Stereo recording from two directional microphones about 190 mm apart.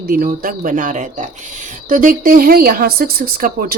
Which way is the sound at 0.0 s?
50° right (ahead or behind).